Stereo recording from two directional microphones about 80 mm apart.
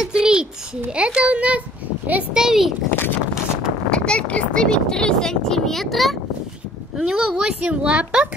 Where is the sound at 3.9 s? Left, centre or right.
Centre.